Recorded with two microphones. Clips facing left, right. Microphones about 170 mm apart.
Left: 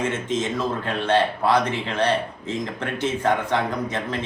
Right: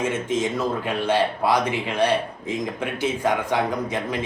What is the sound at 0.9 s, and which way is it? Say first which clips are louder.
A man's voice: left 2 dB; 10° right (ahead or behind).